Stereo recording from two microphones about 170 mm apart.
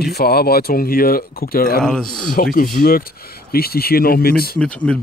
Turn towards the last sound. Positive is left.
turn(degrees=5)  # may be behind; listen again after turning